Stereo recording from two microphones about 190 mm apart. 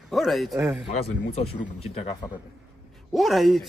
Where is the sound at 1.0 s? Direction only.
30° left (ahead or behind).